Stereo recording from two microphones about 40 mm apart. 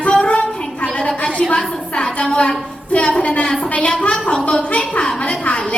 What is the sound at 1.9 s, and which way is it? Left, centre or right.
A woman's voice, left.